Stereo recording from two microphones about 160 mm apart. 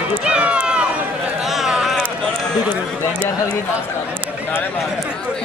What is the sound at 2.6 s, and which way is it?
Speech, 10° right (ahead or behind).